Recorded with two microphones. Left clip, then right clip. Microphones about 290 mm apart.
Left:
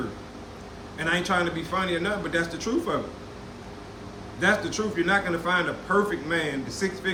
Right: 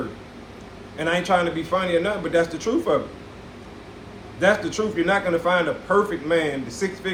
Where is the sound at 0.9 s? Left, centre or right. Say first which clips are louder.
Right 4 dB; centre.